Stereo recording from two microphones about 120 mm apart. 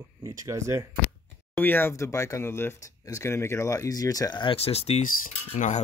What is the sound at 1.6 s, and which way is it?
Speech, 20° left (ahead or behind).